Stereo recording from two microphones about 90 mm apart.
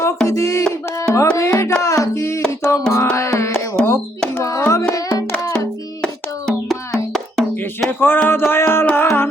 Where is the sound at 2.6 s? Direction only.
30° left (ahead or behind).